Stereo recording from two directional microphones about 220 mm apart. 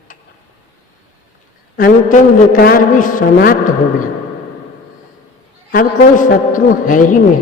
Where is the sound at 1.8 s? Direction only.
35° left (ahead or behind).